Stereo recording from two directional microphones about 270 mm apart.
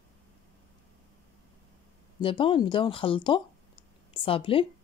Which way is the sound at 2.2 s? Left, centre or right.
Centre.